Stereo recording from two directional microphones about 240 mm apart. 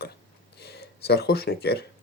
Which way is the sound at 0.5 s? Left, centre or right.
Left.